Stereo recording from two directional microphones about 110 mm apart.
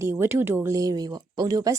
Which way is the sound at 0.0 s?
20° right (ahead or behind).